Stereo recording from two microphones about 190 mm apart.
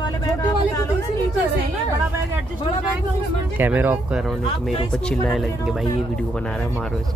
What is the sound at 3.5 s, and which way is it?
Speech, 10° right (ahead or behind).